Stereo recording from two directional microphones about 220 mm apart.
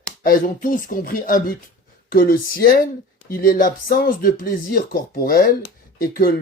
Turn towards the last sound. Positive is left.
turn(degrees=40)  # may be behind; listen again after turning